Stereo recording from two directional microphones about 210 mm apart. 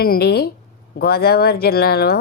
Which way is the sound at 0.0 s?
45° left (ahead or behind).